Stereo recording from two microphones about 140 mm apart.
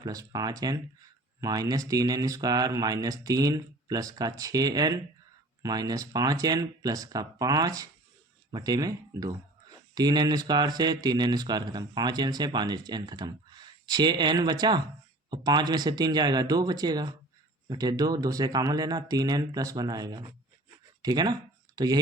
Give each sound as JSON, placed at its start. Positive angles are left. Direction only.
{"t": 0.0, "sound": "speech", "side_deg": -25}